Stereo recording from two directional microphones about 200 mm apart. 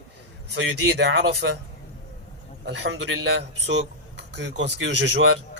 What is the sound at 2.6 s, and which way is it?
A man's voice, 65° right (ahead or behind).